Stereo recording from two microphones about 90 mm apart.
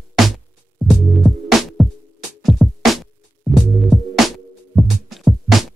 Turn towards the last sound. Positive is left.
turn(degrees=0)  # may be behind; listen again after turning